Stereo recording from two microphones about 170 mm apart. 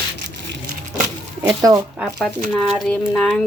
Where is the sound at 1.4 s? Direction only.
20° right (ahead or behind).